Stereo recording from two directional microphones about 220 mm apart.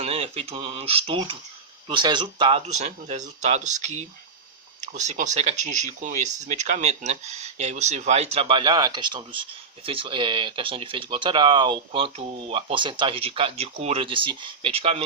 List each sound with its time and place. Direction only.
0.0 s speech: 25° right (ahead or behind)